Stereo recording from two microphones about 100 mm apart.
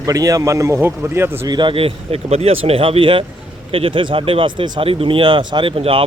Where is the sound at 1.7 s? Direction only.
80° right; by 4.9 s 55° right (ahead or behind).